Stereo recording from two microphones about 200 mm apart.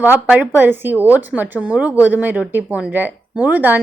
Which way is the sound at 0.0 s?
10° right (ahead or behind).